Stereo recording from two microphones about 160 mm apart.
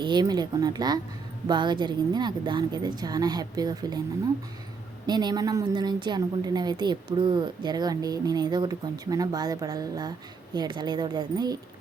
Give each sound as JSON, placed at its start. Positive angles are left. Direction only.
{"t": 0.0, "sound": "a woman's voice", "side_deg": -25}
{"t": 5.0, "sound": "a woman's voice", "side_deg": -25}